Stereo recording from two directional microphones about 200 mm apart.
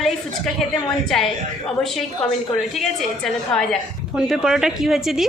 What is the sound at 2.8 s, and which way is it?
A woman's voice, centre (ahead or behind).